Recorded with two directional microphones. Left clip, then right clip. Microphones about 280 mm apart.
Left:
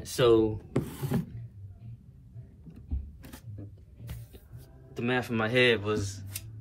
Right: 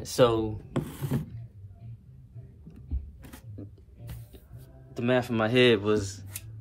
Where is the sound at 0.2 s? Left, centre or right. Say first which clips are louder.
Even; centre.